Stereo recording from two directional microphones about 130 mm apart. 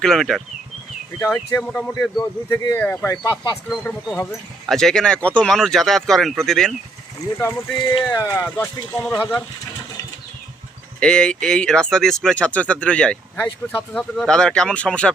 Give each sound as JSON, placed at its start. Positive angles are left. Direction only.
{"t": 0.0, "sound": "speech", "side_deg": 5}
{"t": 3.1, "sound": "speech", "side_deg": 25}
{"t": 3.7, "sound": "speech", "side_deg": 5}
{"t": 8.1, "sound": "speech", "side_deg": 25}
{"t": 11.0, "sound": "speech", "side_deg": 5}